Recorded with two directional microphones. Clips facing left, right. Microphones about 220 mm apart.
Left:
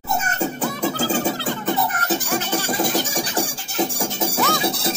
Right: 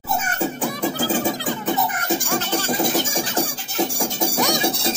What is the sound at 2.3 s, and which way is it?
Music, 10° left (ahead or behind).